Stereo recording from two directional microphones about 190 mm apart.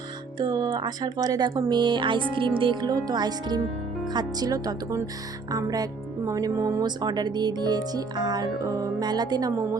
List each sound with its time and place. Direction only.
0.3 s speech: 20° right (ahead or behind)